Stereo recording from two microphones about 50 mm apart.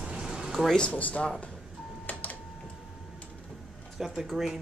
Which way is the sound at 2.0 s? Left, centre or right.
Left.